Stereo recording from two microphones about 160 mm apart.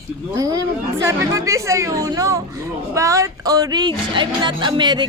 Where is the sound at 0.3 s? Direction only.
20° right (ahead or behind).